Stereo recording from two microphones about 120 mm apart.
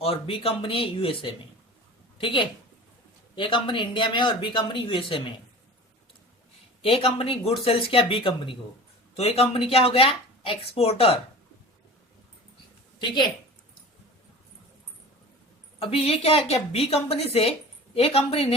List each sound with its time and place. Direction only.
0.0 s a woman's voice: 50° left (ahead or behind)
6.8 s speech: 55° left (ahead or behind)
9.1 s speech: 60° left (ahead or behind)
15.8 s speech: 55° left (ahead or behind)